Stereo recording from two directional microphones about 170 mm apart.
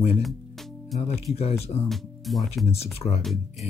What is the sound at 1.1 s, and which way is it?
Speech, 35° left (ahead or behind).